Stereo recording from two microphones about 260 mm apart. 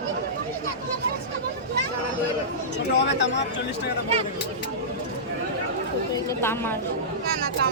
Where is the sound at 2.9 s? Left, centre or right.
Left.